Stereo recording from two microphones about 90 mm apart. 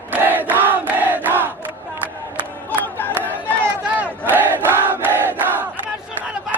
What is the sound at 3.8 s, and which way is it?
Crowd, 15° right (ahead or behind).